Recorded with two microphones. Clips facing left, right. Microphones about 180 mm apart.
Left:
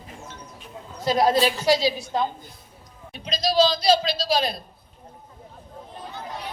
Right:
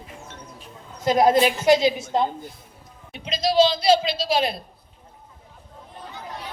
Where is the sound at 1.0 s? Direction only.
20° right (ahead or behind).